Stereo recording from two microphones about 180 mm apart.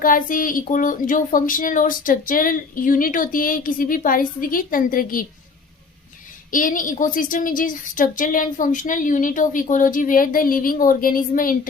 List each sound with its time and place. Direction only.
0.0 s a woman's voice: 50° left (ahead or behind)
6.5 s a woman's voice: 50° left (ahead or behind)